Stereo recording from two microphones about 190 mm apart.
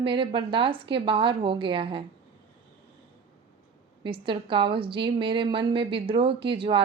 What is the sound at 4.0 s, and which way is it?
A woman's voice, 25° right (ahead or behind).